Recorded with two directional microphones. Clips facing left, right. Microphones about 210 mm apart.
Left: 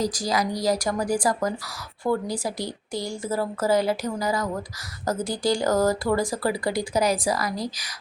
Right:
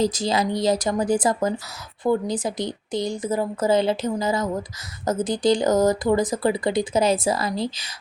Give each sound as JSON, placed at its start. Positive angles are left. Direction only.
{"t": 0.0, "sound": "speech", "side_deg": -25}